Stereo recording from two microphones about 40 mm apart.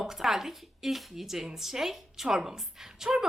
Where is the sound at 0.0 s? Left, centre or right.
Centre.